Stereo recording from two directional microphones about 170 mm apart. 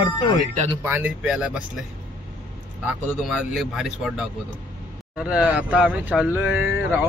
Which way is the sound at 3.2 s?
Centre (ahead or behind).